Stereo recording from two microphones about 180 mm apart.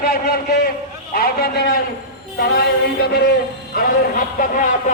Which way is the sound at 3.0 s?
65° left (ahead or behind).